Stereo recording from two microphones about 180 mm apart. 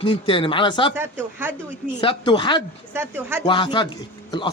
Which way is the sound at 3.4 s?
25° left (ahead or behind).